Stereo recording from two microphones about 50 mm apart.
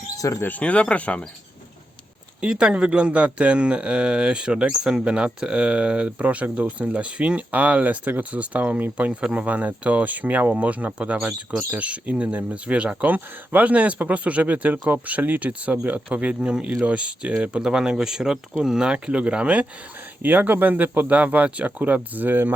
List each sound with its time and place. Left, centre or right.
0.2 s speech: left
0.6 s speech: left
2.4 s speech: centre
18.9 s speech: right
20.2 s speech: right